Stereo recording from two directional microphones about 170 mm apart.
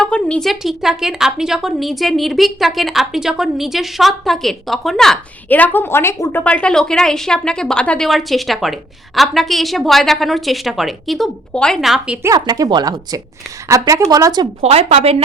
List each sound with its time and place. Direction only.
0.0 s a woman's voice: 5° left (ahead or behind)
12.2 s speech: 20° right (ahead or behind)
14.6 s speech: 35° right (ahead or behind)